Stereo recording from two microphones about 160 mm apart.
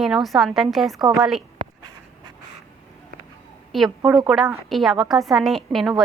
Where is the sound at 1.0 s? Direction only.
20° right (ahead or behind).